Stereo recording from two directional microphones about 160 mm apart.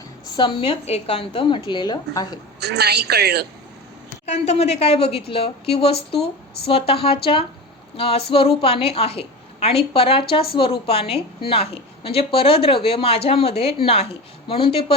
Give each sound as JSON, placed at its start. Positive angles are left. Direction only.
{"t": 0.3, "sound": "a woman's voice", "side_deg": 30}
{"t": 2.6, "sound": "a woman's voice", "side_deg": -90}
{"t": 4.3, "sound": "a woman's voice", "side_deg": 40}